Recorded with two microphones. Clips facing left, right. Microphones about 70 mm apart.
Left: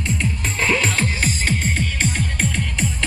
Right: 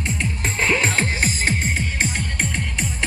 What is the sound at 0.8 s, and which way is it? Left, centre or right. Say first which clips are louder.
Music: even; right.